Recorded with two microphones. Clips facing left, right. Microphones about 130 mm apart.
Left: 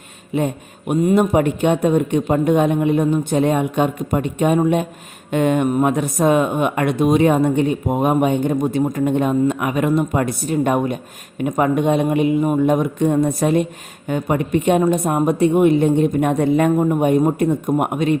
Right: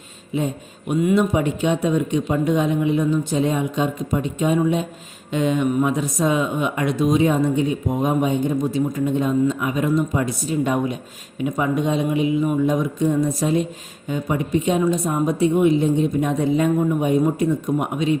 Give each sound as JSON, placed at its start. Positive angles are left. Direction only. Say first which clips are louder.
{"t": 0.3, "sound": "speech", "louder": "left 3 dB", "side_deg": 60}